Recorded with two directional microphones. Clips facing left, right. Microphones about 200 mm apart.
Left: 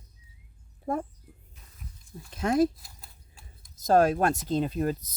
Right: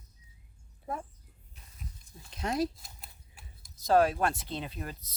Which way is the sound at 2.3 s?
50° left (ahead or behind).